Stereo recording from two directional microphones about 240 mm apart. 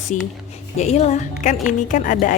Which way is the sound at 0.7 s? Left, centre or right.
Left.